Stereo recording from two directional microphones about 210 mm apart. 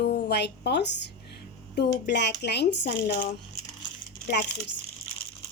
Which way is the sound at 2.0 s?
55° left (ahead or behind).